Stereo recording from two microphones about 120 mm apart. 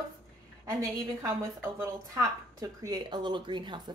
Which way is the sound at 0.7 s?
30° right (ahead or behind).